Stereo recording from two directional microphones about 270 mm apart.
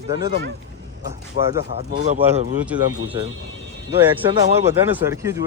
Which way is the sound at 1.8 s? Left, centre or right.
Right.